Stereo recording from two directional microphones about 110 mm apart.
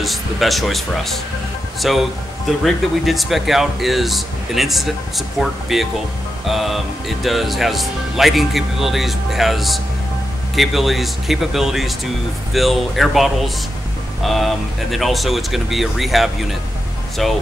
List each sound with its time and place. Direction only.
0.0 s speech: centre (ahead or behind)